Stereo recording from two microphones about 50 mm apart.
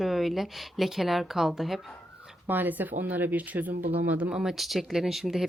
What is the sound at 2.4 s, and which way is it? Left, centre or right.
Speech, right.